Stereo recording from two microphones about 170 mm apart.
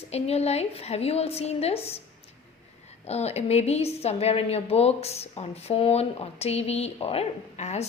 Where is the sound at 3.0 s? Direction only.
40° left (ahead or behind).